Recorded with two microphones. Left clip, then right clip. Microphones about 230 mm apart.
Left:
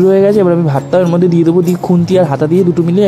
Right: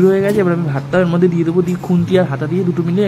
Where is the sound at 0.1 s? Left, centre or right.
Centre.